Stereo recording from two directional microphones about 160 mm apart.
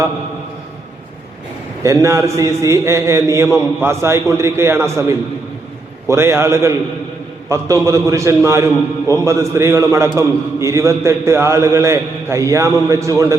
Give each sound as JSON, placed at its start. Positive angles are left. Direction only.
{"t": 1.8, "sound": "a man's voice", "side_deg": -20}